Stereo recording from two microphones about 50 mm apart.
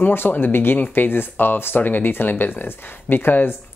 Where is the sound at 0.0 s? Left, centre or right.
Left.